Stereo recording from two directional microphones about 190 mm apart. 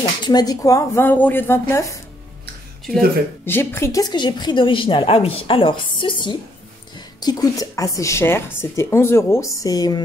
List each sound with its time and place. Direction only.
0.2 s a woman's voice: 20° left (ahead or behind)
3.4 s a woman's voice: 10° left (ahead or behind)